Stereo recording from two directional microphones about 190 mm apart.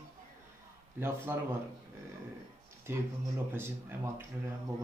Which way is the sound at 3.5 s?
10° right (ahead or behind).